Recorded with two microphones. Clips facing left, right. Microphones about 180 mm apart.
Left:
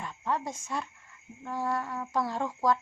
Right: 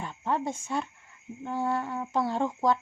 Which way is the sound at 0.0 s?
30° right (ahead or behind).